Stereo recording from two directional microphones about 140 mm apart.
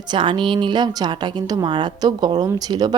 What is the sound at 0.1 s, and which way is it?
A woman's voice, 35° right (ahead or behind).